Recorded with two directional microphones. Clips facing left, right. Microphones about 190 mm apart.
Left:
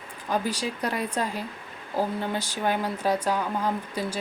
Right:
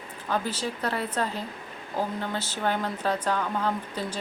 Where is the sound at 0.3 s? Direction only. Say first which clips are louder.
Left 2 dB; 10° left (ahead or behind).